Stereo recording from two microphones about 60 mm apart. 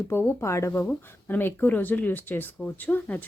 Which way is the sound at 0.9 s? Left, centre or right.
Left.